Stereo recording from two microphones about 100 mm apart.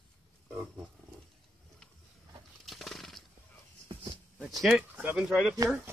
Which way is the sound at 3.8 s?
50° right (ahead or behind).